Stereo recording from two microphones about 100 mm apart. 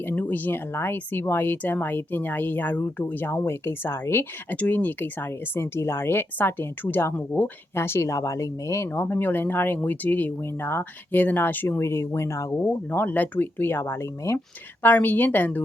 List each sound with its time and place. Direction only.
0.0 s speech: 20° left (ahead or behind)
12.6 s speech: 20° left (ahead or behind)